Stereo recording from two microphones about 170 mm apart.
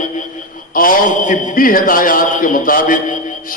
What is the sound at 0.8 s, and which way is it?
A man's voice, 50° left (ahead or behind).